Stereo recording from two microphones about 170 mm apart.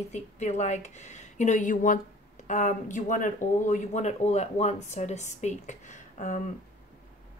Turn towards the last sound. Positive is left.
turn(degrees=50)  # may be behind; listen again after turning